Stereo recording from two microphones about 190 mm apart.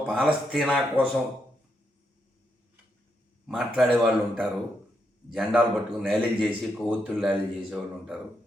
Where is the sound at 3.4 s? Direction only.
Centre (ahead or behind).